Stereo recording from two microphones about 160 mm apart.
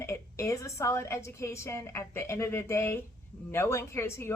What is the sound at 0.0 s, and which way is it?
Speech, 20° left (ahead or behind).